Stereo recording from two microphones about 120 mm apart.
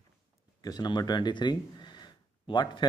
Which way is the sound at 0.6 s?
35° left (ahead or behind).